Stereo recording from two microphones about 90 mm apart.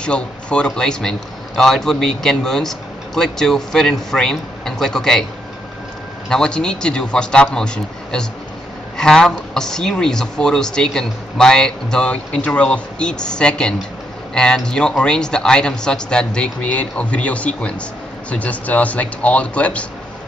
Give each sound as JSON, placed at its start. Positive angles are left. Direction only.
{"t": 0.0, "sound": "a man's voice", "side_deg": 10}
{"t": 6.2, "sound": "a man's voice", "side_deg": 10}